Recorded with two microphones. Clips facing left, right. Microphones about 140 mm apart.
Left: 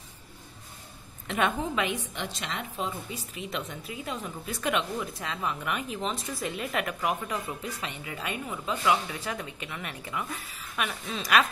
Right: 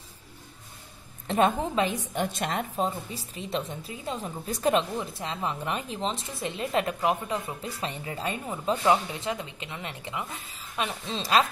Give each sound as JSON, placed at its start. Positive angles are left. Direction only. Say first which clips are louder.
{"t": 1.2, "sound": "a woman's voice", "louder": "right 4 dB", "side_deg": -35}
{"t": 2.1, "sound": "a woman's voice", "louder": "right 7 dB", "side_deg": -45}